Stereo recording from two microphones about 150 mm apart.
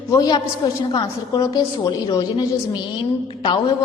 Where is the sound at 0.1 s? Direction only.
25° left (ahead or behind).